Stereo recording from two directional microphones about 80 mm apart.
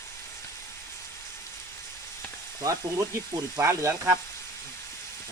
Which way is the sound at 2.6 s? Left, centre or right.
Right.